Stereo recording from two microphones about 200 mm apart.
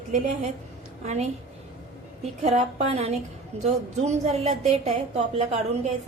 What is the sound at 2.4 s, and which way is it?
A woman's voice, 35° right (ahead or behind).